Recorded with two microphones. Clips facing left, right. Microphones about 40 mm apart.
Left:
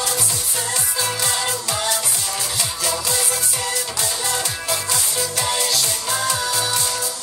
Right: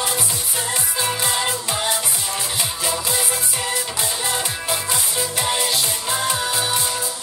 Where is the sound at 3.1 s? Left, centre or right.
Centre.